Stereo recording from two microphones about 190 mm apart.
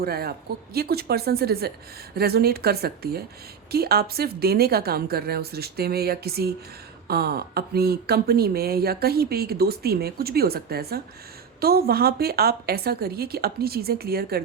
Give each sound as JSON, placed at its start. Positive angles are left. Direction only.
{"t": 0.0, "sound": "speech", "side_deg": -55}